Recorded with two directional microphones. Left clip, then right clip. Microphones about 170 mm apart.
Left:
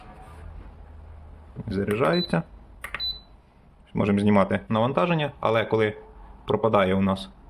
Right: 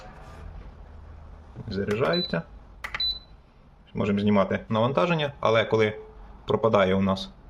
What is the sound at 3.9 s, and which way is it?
Speech, 25° left (ahead or behind).